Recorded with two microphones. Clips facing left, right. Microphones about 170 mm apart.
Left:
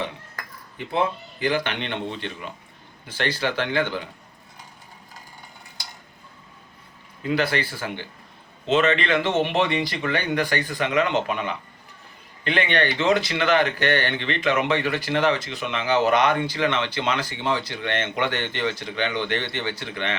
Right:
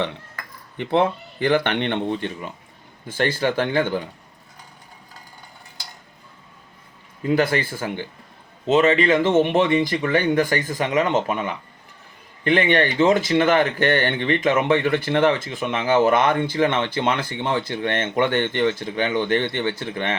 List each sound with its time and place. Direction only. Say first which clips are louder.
0.8 s speech: right 5 dB; 65° right (ahead or behind)
3.1 s speech: right 4 dB; 50° right (ahead or behind)
7.3 s speech: right 4 dB; 45° right (ahead or behind)